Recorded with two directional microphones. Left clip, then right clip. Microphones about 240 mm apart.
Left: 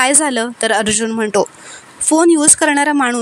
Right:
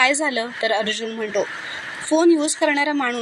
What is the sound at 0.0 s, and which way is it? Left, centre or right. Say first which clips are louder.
Speech: left 4 dB; left.